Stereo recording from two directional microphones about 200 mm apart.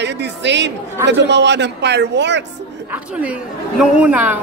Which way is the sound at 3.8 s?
5° right (ahead or behind).